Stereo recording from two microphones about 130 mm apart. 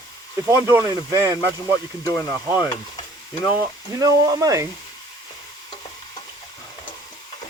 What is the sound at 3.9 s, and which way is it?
Speech, 30° right (ahead or behind).